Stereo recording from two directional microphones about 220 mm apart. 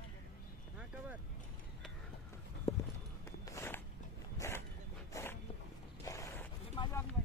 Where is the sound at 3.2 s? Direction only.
10° left (ahead or behind).